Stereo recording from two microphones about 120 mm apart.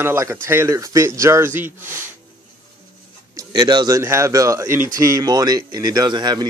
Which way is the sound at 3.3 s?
35° right (ahead or behind).